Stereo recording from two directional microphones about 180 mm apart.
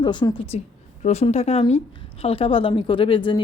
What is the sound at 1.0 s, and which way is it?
Speech, 40° left (ahead or behind).